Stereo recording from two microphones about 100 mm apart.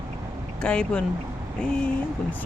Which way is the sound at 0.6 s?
10° left (ahead or behind).